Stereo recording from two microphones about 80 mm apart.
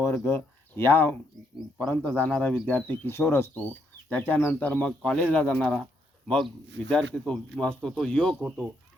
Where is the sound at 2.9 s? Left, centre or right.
Left; by 5.9 s centre.